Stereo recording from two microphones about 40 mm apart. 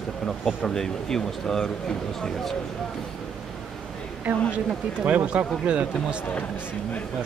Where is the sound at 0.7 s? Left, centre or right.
Centre.